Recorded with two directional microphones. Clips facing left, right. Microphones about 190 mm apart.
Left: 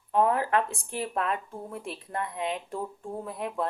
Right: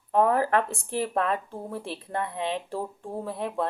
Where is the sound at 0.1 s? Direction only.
40° right (ahead or behind).